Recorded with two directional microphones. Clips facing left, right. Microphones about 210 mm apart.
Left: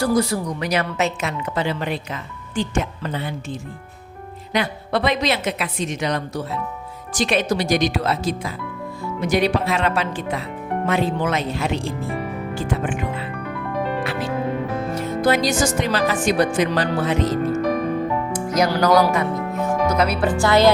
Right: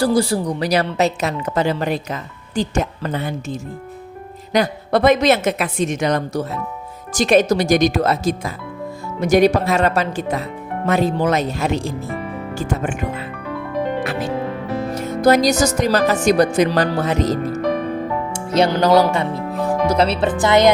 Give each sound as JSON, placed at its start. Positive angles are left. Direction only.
{"t": 0.0, "sound": "a woman's voice", "side_deg": -30}
{"t": 15.2, "sound": "a woman's voice", "side_deg": -40}
{"t": 18.3, "sound": "speech", "side_deg": -25}